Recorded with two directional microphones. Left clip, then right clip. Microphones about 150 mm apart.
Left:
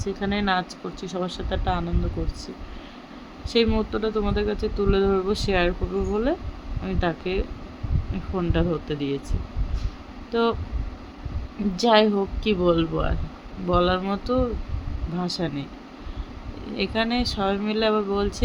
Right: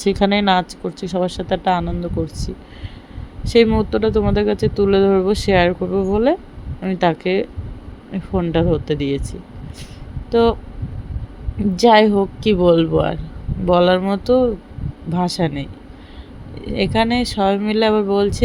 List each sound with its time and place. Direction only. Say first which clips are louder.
0.0 s speech: right 10 dB; 55° right (ahead or behind)
3.4 s speech: right 8 dB; 40° right (ahead or behind)
10.3 s speech: right 8 dB; 35° right (ahead or behind)
11.8 s speech: right 7 dB; 40° right (ahead or behind)
16.7 s speech: right 7 dB; 40° right (ahead or behind)